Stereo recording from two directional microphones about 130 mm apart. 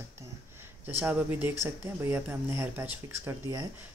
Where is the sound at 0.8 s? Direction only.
15° right (ahead or behind).